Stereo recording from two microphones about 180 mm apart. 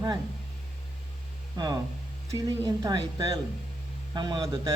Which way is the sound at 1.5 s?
25° right (ahead or behind).